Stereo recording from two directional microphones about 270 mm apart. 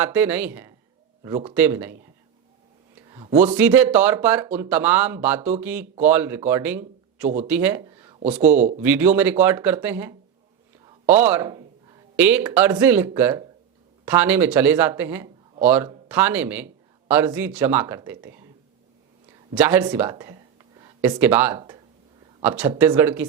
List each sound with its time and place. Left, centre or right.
0.0 s speech: centre
8.5 s speech: right
8.8 s speech: centre
19.5 s speech: centre